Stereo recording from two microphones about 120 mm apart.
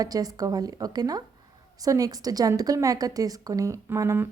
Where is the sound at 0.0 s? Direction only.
30° right (ahead or behind).